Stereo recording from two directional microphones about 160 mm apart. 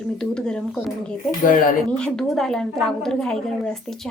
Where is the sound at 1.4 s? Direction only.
60° left (ahead or behind).